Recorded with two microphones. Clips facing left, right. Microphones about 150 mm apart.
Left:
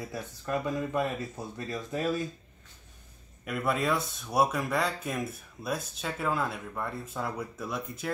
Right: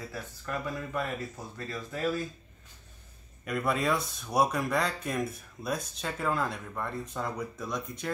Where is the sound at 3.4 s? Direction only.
Centre (ahead or behind).